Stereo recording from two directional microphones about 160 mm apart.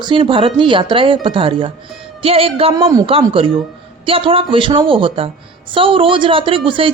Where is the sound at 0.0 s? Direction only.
30° right (ahead or behind).